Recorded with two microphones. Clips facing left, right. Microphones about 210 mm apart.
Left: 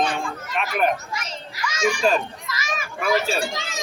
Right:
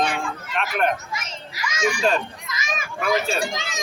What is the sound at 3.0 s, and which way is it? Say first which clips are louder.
Speech: left 1 dB; 5° left (ahead or behind).